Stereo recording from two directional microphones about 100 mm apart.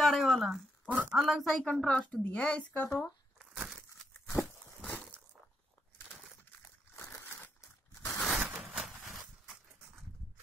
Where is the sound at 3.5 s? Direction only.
5° right (ahead or behind).